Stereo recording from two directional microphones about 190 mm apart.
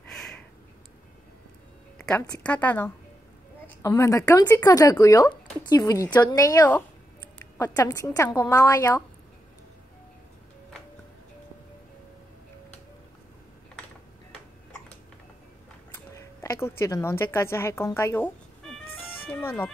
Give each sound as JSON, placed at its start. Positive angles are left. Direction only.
{"t": 2.0, "sound": "a sound", "side_deg": 5}
{"t": 2.4, "sound": "speech", "side_deg": 10}
{"t": 15.9, "sound": "a woman's voice", "side_deg": 15}